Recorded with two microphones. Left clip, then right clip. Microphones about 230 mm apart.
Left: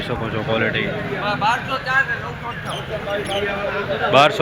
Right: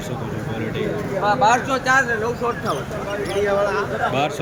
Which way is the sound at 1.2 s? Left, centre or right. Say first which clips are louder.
Right 4 dB; right.